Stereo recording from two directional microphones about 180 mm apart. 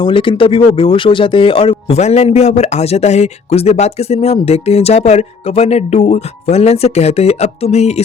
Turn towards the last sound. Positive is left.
turn(degrees=35)  # may be behind; listen again after turning